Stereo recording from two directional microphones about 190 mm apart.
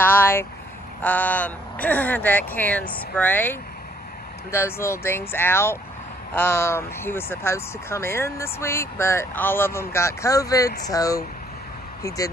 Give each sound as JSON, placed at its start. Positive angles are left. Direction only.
{"t": 0.0, "sound": "vehicle", "side_deg": 10}
{"t": 1.0, "sound": "speech", "side_deg": 10}